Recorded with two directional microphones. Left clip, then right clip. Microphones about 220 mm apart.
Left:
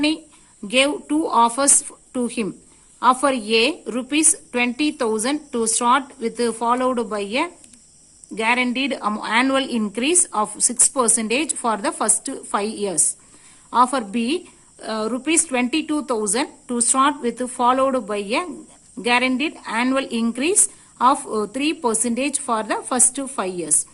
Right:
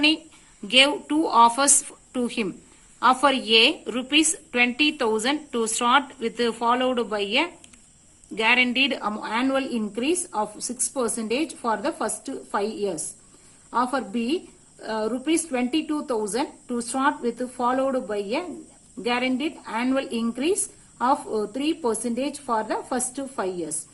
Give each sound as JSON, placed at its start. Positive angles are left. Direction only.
{"t": 0.7, "sound": "a woman's voice", "side_deg": 50}